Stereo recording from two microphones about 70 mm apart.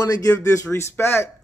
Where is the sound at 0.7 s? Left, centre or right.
Left.